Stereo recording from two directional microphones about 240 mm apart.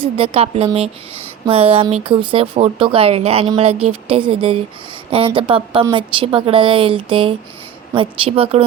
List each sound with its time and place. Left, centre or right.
0.0 s speech: right